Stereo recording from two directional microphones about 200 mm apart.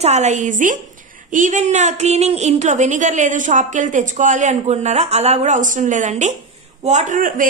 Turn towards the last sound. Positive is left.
turn(degrees=-40)  # may be behind; listen again after turning